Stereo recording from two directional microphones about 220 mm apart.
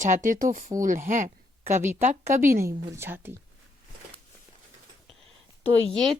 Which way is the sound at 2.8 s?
10° right (ahead or behind).